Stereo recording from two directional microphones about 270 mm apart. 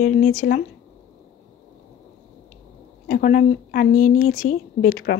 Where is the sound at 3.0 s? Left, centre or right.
Left.